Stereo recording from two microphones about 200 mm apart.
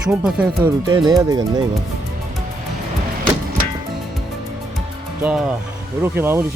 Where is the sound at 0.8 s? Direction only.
20° right (ahead or behind).